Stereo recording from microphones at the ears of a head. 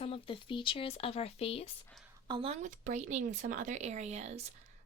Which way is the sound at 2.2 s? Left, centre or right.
Right.